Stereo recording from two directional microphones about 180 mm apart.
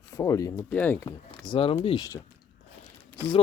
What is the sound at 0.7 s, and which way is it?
Speech, 5° left (ahead or behind).